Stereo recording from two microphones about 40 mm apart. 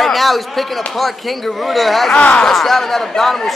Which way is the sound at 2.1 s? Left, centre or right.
Left.